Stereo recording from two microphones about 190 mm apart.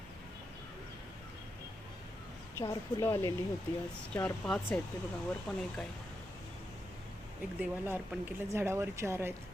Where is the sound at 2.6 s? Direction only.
15° left (ahead or behind).